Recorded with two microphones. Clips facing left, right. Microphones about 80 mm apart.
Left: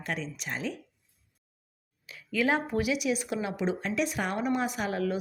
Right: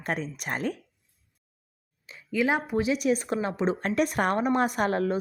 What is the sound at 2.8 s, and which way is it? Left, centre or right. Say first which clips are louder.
Speech: right 4 dB; right.